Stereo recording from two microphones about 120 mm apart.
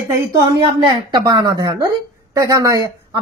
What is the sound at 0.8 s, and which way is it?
A woman's voice, 40° right (ahead or behind).